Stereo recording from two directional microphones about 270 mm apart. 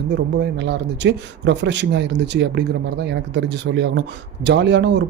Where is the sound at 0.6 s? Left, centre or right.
Right.